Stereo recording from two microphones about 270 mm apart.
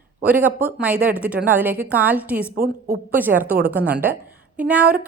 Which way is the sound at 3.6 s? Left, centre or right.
Centre.